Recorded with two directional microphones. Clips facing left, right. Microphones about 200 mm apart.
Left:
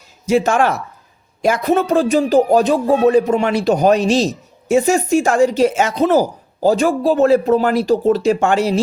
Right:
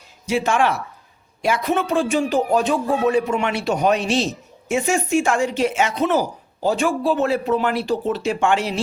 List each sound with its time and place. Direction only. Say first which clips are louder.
0.3 s speech: left 5 dB; 40° left (ahead or behind)